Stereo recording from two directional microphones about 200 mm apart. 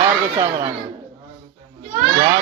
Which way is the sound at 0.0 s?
20° right (ahead or behind).